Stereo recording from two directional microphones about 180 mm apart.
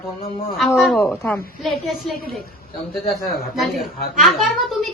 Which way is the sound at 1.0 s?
10° left (ahead or behind).